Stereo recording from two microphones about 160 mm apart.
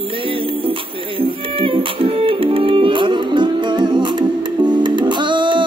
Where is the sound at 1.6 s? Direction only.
35° right (ahead or behind).